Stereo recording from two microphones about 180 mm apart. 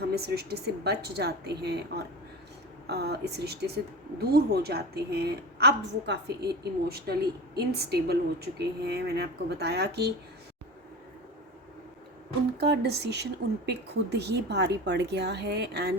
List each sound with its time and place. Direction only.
0.1 s a woman's voice: 65° right (ahead or behind)
12.5 s a woman's voice: 65° right (ahead or behind)